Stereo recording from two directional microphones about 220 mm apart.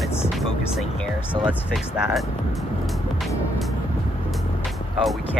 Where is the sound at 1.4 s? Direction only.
Centre (ahead or behind).